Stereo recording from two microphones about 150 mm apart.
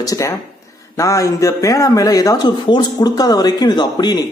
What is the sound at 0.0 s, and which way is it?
Speech, 20° left (ahead or behind).